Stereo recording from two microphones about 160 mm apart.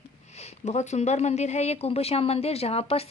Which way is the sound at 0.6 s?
45° left (ahead or behind).